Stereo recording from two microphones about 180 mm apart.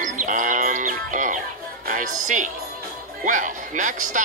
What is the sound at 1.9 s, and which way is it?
Speech, 45° right (ahead or behind).